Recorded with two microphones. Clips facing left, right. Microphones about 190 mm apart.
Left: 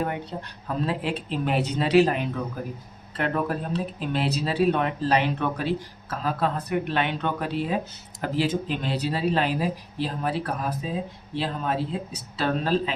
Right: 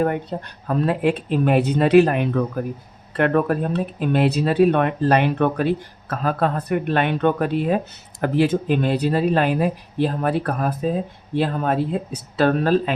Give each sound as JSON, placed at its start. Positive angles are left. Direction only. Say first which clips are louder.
{"t": 0.0, "sound": "speech", "louder": "right 7 dB", "side_deg": -50}